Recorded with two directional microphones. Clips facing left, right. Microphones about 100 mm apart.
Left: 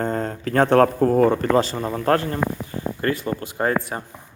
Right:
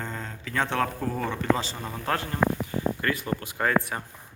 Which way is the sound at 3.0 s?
30° left (ahead or behind).